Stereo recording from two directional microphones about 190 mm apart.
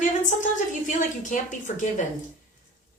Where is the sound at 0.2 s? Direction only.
40° left (ahead or behind).